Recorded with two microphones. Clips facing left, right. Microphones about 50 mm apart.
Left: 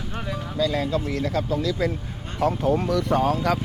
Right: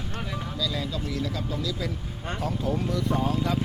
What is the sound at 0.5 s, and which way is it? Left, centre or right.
Speech, left.